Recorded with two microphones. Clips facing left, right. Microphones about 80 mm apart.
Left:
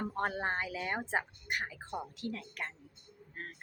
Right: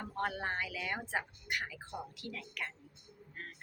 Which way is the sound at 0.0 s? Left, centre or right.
Left.